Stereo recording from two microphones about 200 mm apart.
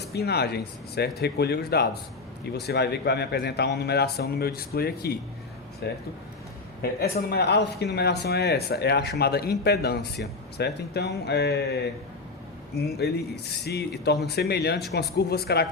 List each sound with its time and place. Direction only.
0.1 s speech: 55° left (ahead or behind)
13.0 s speech: 55° left (ahead or behind)